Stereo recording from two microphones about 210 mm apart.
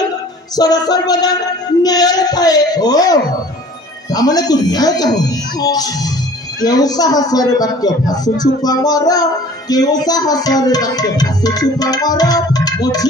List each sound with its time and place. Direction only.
0.6 s music: 20° left (ahead or behind)